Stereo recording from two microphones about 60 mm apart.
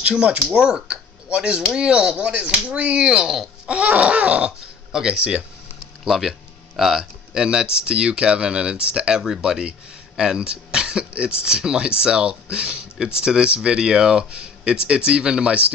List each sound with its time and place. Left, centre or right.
0.0 s speech: centre
4.6 s speech: centre